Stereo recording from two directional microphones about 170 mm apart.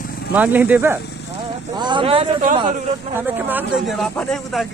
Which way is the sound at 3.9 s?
Centre (ahead or behind).